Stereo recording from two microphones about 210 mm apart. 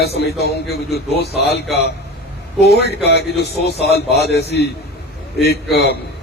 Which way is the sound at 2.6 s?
50° left (ahead or behind).